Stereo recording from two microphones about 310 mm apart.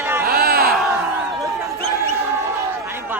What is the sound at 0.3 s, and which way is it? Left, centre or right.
Crowd, right.